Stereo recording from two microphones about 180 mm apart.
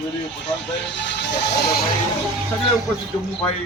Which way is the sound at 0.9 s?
75° left (ahead or behind).